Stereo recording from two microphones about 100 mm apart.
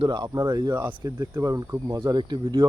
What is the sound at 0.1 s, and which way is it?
Speech, 45° right (ahead or behind).